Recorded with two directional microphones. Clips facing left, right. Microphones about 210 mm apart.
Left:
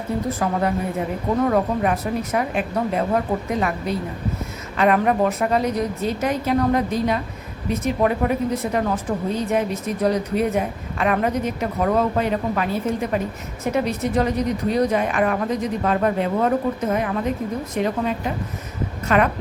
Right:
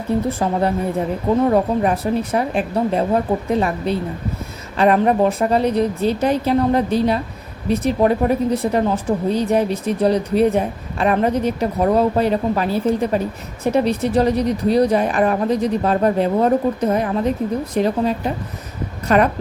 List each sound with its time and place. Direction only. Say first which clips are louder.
0.3 s a woman's voice: right 3 dB; 25° right (ahead or behind)